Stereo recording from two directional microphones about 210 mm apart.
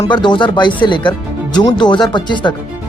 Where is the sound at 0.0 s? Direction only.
20° left (ahead or behind).